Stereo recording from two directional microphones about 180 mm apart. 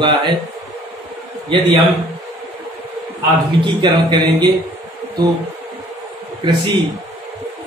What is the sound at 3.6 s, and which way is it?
Speech, 25° right (ahead or behind).